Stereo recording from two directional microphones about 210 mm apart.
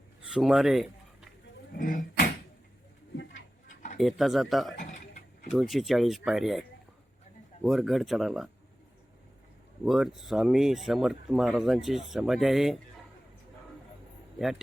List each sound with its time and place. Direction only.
0.3 s speech: centre (ahead or behind)
1.7 s a sound: 40° left (ahead or behind)
3.9 s speech: centre (ahead or behind)
4.8 s mechanisms: 35° left (ahead or behind)
5.5 s speech: centre (ahead or behind)
9.8 s speech: centre (ahead or behind)